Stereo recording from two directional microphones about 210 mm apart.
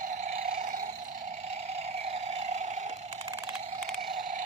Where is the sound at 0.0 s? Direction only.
35° right (ahead or behind).